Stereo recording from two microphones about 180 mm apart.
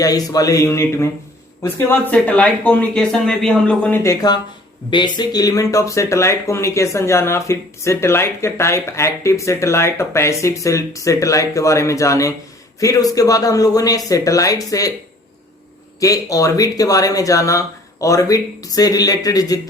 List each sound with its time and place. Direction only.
0.0 s speech: 20° left (ahead or behind)
16.0 s speech: 20° left (ahead or behind)